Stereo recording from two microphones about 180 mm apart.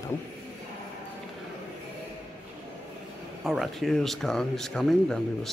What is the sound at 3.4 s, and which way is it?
Speech, centre (ahead or behind).